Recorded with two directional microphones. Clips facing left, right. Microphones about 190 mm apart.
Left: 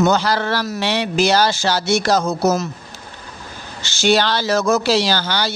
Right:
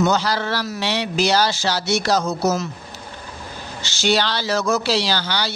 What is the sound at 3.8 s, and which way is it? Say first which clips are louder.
Speech: left 4 dB; 50° left (ahead or behind).